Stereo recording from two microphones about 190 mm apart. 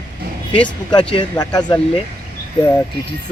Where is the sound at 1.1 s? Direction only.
25° left (ahead or behind).